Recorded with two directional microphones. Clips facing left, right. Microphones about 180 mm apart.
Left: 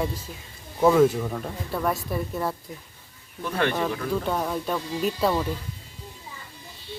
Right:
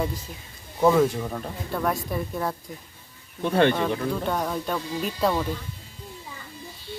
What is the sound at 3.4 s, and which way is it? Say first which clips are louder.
Speech: right 5 dB; 30° right (ahead or behind).